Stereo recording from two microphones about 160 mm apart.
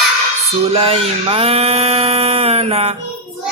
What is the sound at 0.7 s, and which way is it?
Mantra, 35° right (ahead or behind).